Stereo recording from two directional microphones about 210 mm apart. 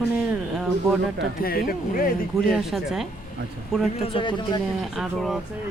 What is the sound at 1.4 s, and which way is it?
Speech, 45° left (ahead or behind).